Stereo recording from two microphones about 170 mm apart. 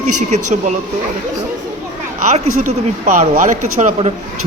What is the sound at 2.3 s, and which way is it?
Speech, 45° right (ahead or behind).